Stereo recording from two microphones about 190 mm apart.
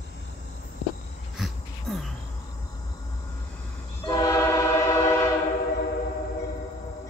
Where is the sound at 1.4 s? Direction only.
Centre (ahead or behind).